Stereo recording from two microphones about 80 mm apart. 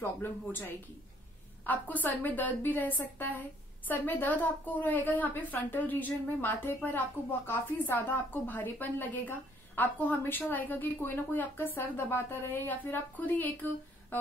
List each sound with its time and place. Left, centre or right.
0.0 s a woman's voice: left